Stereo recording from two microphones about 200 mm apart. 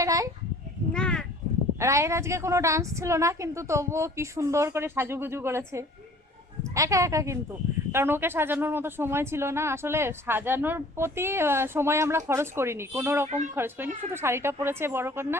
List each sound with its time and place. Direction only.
0.0 s goat: 15° right (ahead or behind)
0.9 s a sound: 5° left (ahead or behind)
1.8 s speech: 15° right (ahead or behind)
13.2 s speech: 35° right (ahead or behind)
13.6 s speech: 10° right (ahead or behind)